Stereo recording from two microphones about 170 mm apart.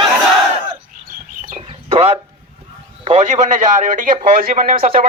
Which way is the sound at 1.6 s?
35° right (ahead or behind).